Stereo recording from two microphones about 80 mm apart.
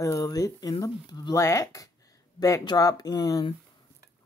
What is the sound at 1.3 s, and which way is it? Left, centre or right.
Speech, left.